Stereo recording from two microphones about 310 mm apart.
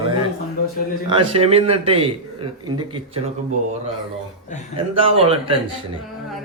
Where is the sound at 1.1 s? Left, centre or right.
Centre.